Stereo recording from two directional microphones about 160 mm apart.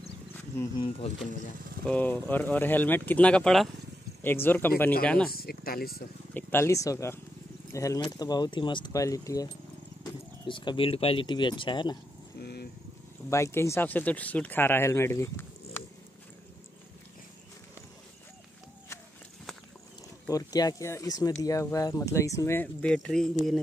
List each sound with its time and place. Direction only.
1.9 s speech: 10° left (ahead or behind)
5.3 s speech: 70° left (ahead or behind)
6.3 s speech: 15° left (ahead or behind)
12.4 s vehicle: 90° left
13.3 s speech: 15° left (ahead or behind)
20.2 s speech: 25° left (ahead or behind); by 23.6 s centre (ahead or behind)